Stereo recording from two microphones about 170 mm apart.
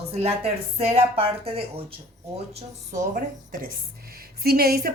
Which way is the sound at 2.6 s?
45° right (ahead or behind).